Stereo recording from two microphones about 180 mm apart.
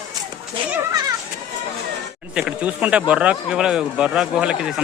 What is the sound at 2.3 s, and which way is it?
Speech, 5° right (ahead or behind).